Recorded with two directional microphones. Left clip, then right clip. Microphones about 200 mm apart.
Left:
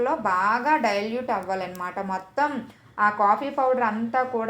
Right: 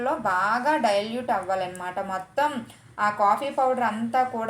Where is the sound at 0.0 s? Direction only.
15° left (ahead or behind).